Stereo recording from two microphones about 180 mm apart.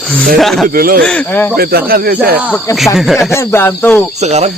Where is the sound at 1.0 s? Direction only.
10° left (ahead or behind).